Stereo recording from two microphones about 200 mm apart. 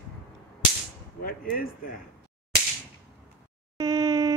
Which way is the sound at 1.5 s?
45° left (ahead or behind).